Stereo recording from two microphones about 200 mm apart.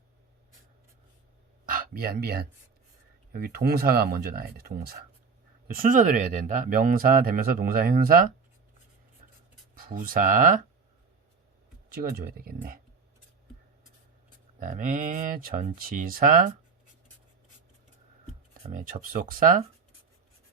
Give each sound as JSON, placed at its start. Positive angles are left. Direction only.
{"t": 1.6, "sound": "speech", "side_deg": -45}
{"t": 9.7, "sound": "speech", "side_deg": -45}
{"t": 11.9, "sound": "speech", "side_deg": -50}
{"t": 14.6, "sound": "speech", "side_deg": -40}
{"t": 18.7, "sound": "speech", "side_deg": -45}